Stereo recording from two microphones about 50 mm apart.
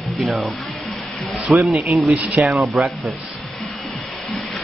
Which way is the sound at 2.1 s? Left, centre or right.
Right.